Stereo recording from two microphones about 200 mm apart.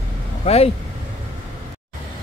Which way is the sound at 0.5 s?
30° left (ahead or behind).